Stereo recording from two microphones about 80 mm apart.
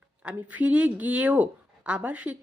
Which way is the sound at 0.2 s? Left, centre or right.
Centre.